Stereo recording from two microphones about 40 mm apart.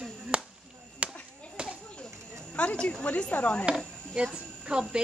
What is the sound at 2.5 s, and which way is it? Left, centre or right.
Speech, left.